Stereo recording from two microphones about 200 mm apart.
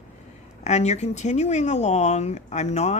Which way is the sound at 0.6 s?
35° left (ahead or behind).